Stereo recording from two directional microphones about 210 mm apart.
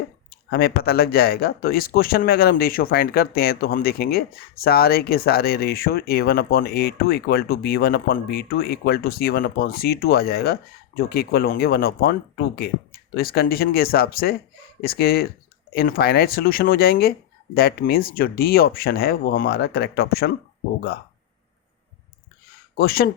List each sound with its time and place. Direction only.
0.5 s speech: 45° left (ahead or behind)
22.8 s speech: 45° left (ahead or behind)